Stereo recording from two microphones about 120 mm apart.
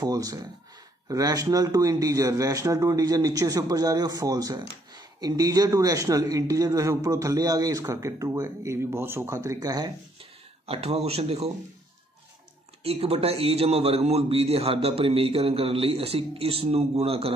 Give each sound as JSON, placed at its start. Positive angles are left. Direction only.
{"t": 0.0, "sound": "a man's voice", "side_deg": -30}
{"t": 10.7, "sound": "a man's voice", "side_deg": -60}
{"t": 12.8, "sound": "a man's voice", "side_deg": -55}